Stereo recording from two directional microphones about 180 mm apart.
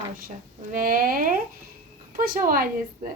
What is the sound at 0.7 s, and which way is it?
A woman's voice, 50° right (ahead or behind).